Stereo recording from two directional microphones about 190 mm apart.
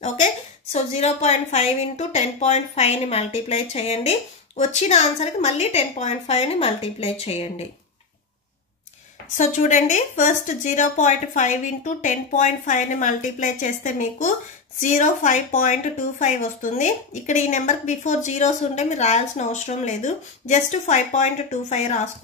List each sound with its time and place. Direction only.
0.7 s a woman's voice: 35° left (ahead or behind)
9.4 s a woman's voice: 40° left (ahead or behind)